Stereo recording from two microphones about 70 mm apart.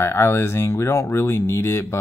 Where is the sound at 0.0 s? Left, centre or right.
Left.